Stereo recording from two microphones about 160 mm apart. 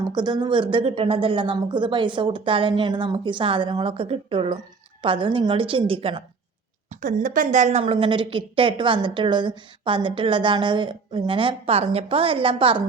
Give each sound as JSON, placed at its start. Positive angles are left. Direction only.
{"t": 0.0, "sound": "a woman's voice", "side_deg": -25}
{"t": 6.9, "sound": "a woman's voice", "side_deg": -55}